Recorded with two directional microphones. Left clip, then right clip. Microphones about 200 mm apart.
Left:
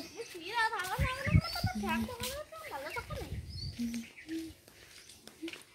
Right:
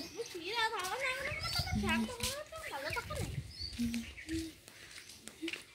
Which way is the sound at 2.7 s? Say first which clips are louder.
Right 1 dB; 45° left (ahead or behind).